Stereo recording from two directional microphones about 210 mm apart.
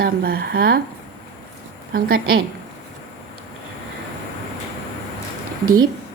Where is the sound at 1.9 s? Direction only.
45° right (ahead or behind).